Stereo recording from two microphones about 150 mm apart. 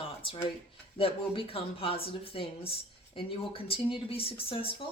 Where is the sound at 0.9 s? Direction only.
40° left (ahead or behind).